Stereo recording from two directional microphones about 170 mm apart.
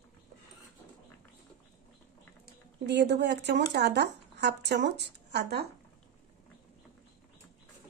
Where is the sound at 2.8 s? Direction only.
80° right.